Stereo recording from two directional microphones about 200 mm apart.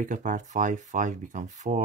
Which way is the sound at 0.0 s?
40° right (ahead or behind).